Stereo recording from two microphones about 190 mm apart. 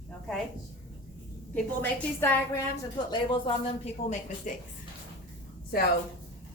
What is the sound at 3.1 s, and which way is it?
Speech, 25° left (ahead or behind).